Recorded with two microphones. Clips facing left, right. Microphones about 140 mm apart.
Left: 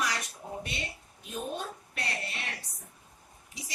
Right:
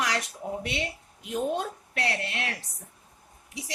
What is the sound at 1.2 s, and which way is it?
A woman's voice, 80° right.